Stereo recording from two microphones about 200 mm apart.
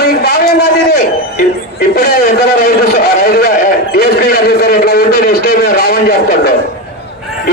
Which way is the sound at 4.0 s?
50° left (ahead or behind).